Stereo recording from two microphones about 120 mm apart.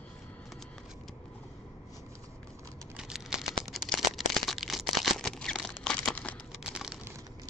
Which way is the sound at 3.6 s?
Centre (ahead or behind).